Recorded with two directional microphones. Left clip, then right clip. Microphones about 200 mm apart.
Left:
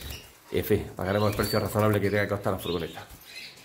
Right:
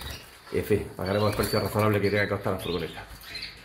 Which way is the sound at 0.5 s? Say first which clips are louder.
Even; 5° left (ahead or behind).